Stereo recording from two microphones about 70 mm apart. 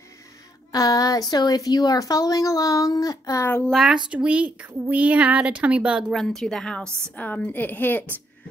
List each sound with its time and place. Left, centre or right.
0.7 s a woman's voice: left
3.7 s a child's voice: centre
4.1 s a woman's voice: centre
6.1 s a woman's voice: centre
7.2 s a woman's voice: left